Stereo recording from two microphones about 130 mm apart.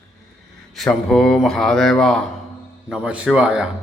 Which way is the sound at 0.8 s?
5° left (ahead or behind).